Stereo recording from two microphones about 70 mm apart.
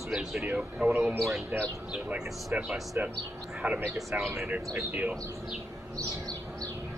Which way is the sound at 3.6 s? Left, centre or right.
Centre.